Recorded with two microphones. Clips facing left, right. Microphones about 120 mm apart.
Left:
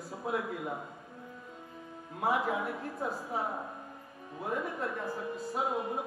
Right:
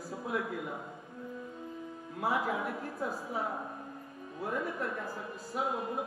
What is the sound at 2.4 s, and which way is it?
Speech, 25° left (ahead or behind).